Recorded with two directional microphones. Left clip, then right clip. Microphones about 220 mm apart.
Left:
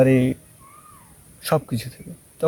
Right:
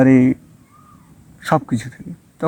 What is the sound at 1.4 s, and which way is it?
Speech, 15° left (ahead or behind).